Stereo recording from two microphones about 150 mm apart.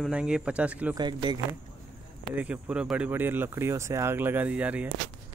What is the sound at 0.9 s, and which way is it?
Speech, 30° right (ahead or behind).